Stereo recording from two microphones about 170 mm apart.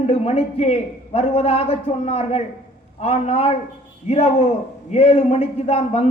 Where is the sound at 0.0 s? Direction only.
35° left (ahead or behind).